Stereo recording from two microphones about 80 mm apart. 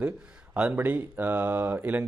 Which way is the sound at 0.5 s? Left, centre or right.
Centre.